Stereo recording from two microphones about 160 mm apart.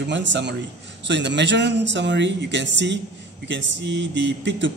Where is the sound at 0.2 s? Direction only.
90° right.